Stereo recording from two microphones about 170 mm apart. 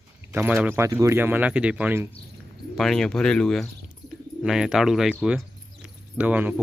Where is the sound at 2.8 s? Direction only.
Centre (ahead or behind).